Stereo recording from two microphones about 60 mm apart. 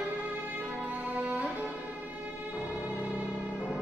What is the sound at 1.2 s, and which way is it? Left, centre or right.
Music, right.